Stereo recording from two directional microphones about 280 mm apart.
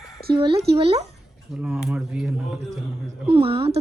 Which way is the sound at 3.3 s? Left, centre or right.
Centre.